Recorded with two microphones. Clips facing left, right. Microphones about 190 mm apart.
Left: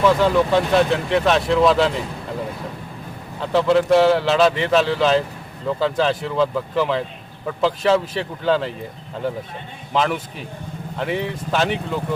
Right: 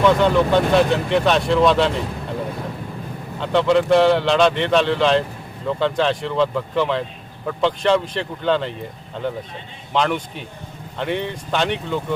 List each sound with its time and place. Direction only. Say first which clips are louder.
0.0 s speech: right 1 dB; centre (ahead or behind)
3.4 s speech: even; centre (ahead or behind)
9.9 s speech: even; centre (ahead or behind)